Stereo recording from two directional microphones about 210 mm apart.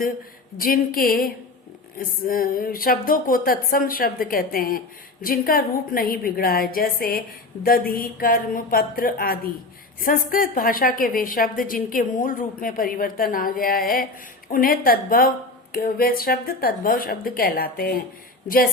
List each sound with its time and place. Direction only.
0.5 s a woman's voice: 45° left (ahead or behind)